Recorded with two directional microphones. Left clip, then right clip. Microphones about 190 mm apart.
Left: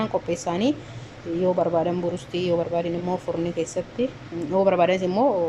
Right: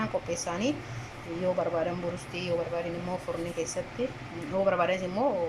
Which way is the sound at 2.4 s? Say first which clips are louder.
Left 7 dB; 20° left (ahead or behind).